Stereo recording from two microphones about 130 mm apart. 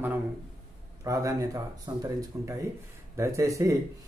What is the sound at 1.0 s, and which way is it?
Speech, 25° right (ahead or behind).